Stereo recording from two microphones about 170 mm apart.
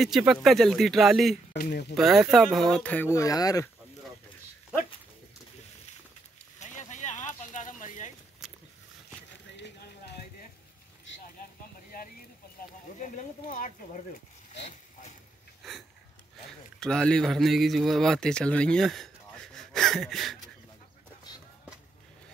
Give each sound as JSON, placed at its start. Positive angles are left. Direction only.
{"t": 0.0, "sound": "speech", "side_deg": -5}
{"t": 1.5, "sound": "speech", "side_deg": 75}
{"t": 2.0, "sound": "speech", "side_deg": 0}
{"t": 6.6, "sound": "a sound", "side_deg": 45}
{"t": 8.4, "sound": "wild animals", "side_deg": 0}
{"t": 9.6, "sound": "a sound", "side_deg": 80}
{"t": 13.0, "sound": "speech", "side_deg": 50}
{"t": 16.8, "sound": "a man's voice", "side_deg": 5}